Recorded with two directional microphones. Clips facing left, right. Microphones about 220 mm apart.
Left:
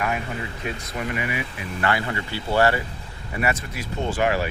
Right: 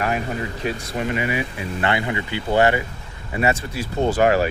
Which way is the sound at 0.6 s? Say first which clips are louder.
Right 5 dB; 30° right (ahead or behind).